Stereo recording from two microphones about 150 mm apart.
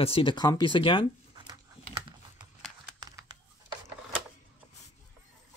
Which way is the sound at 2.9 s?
25° right (ahead or behind).